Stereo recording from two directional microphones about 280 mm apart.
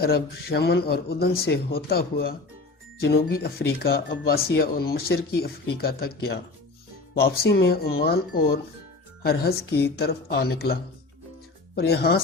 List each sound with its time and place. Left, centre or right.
0.0 s speech: left
7.2 s speech: left